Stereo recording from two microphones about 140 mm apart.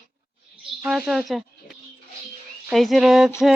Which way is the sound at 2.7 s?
Centre (ahead or behind).